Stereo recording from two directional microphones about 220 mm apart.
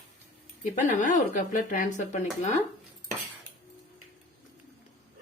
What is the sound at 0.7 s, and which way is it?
Speech, 35° left (ahead or behind).